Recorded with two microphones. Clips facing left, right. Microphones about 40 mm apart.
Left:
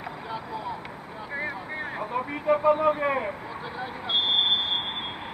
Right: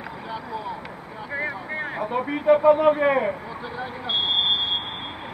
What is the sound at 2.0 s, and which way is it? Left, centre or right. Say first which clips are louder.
A man's voice: right 6 dB; right.